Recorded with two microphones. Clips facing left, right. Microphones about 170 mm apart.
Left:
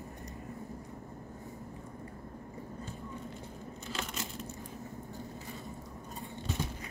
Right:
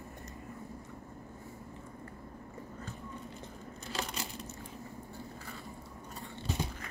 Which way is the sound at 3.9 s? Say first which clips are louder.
Right 2 dB; 35° right (ahead or behind).